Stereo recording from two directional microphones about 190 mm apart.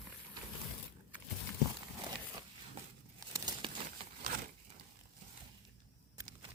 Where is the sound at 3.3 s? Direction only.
20° right (ahead or behind).